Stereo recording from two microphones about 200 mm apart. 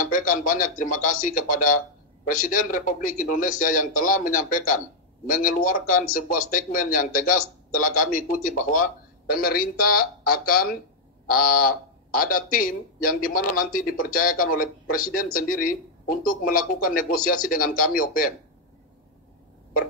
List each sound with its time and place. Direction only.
0.1 s a man's voice: 40° left (ahead or behind)